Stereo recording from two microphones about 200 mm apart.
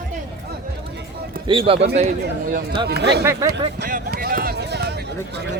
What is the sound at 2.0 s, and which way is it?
Speech, 40° right (ahead or behind).